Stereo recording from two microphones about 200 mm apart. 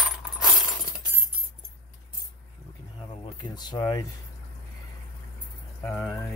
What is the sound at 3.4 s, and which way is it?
Speech, 20° left (ahead or behind).